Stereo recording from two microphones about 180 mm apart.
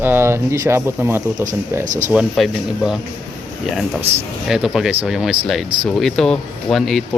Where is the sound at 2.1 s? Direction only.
5° right (ahead or behind).